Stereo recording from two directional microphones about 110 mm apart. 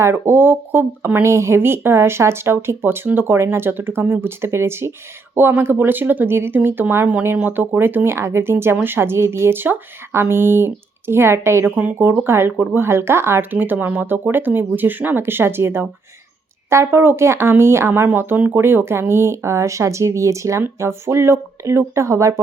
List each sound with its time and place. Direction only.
0.0 s speech: 20° right (ahead or behind)